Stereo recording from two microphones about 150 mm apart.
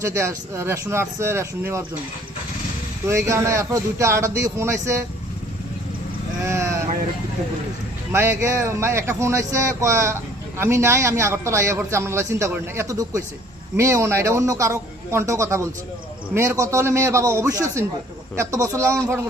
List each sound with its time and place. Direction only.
0.0 s speech: 20° right (ahead or behind)
3.1 s a man's voice: 20° right (ahead or behind)
6.4 s a man's voice: 20° right (ahead or behind)
8.1 s a man's voice: 15° right (ahead or behind)